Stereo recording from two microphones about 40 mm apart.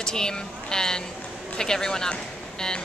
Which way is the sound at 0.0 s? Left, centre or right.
Centre.